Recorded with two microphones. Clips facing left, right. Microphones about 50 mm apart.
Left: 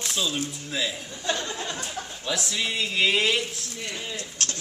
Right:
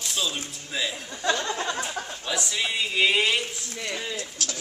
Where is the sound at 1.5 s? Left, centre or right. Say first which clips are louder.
Right 4 dB; right.